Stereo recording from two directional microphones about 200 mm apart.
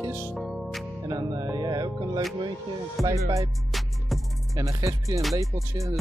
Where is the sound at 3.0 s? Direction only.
Centre (ahead or behind).